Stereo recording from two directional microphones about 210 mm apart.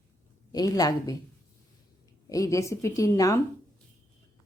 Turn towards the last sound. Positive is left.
turn(degrees=15)  # may be behind; listen again after turning